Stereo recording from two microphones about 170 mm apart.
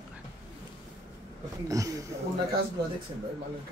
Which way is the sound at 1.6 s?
20° right (ahead or behind).